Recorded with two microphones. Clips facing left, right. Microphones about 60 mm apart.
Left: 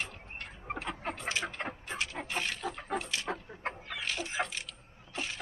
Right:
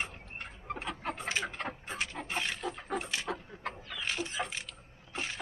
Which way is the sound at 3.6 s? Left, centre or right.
Left.